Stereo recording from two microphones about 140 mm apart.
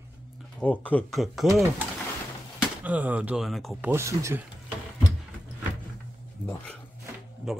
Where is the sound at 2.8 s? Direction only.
10° right (ahead or behind).